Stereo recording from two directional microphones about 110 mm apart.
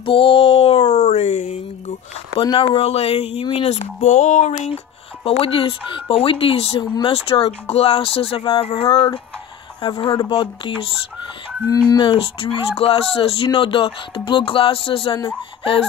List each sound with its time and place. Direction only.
0.0 s a sound: 55° left (ahead or behind)
0.8 s a sound: 90° left
2.6 s speech: 65° left (ahead or behind)
3.6 s speech: 80° left
5.2 s speech: 60° left (ahead or behind)
8.9 s music: 50° left (ahead or behind)
11.6 s speech: 30° left (ahead or behind)
12.0 s speech: 50° left (ahead or behind)
13.5 s music: 50° left (ahead or behind)